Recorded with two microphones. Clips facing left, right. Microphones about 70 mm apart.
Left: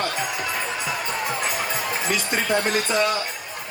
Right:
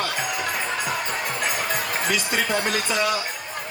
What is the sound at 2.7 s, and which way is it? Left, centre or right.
Speech, left.